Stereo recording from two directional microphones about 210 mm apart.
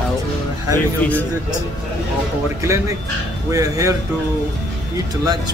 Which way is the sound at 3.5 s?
15° right (ahead or behind).